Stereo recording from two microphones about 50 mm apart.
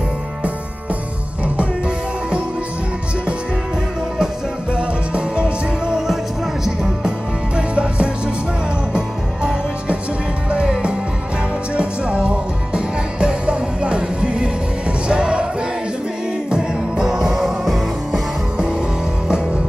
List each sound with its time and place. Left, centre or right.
4.7 s music: centre
11.7 s music: right
16.4 s music: centre
19.2 s music: centre